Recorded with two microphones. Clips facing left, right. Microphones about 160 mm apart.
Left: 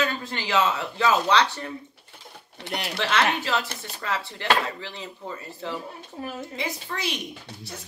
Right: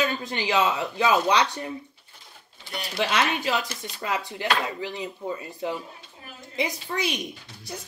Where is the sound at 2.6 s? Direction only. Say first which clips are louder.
Left 4 dB; 75° left (ahead or behind).